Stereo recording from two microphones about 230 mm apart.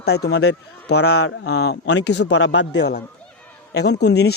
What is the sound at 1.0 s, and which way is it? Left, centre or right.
Speech, left.